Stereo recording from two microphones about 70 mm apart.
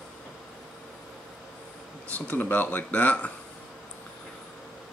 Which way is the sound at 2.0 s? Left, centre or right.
Left.